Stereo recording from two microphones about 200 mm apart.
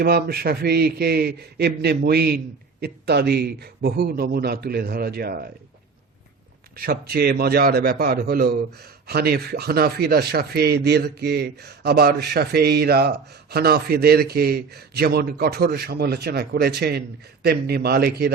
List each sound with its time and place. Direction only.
0.0 s a man's voice: 50° right (ahead or behind)
6.7 s a man's voice: 50° right (ahead or behind)